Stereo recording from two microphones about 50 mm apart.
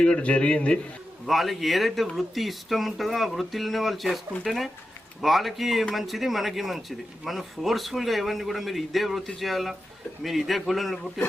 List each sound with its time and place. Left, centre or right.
0.0 s a man's voice: left
1.3 s speech: centre